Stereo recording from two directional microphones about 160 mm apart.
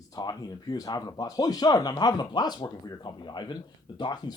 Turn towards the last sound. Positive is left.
turn(degrees=25)  # may be behind; listen again after turning